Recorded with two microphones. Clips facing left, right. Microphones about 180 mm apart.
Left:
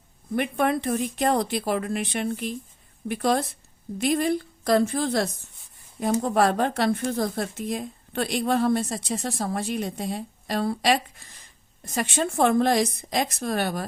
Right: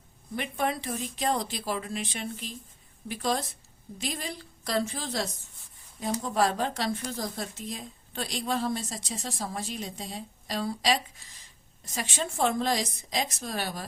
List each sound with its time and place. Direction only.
0.3 s a woman's voice: 55° left (ahead or behind)